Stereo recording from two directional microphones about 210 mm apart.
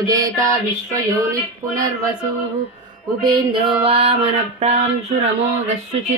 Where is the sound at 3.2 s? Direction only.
20° right (ahead or behind).